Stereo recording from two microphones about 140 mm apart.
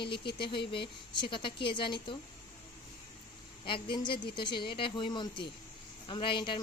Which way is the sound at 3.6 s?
35° left (ahead or behind).